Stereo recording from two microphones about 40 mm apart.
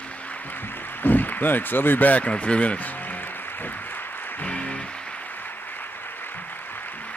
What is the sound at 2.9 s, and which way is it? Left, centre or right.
Music, left.